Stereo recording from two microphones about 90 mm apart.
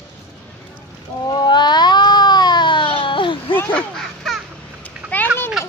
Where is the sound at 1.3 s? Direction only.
50° left (ahead or behind).